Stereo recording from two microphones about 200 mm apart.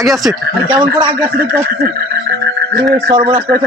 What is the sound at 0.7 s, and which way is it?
Speech, 20° right (ahead or behind).